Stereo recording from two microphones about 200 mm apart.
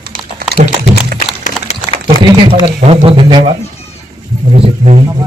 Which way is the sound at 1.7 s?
30° left (ahead or behind).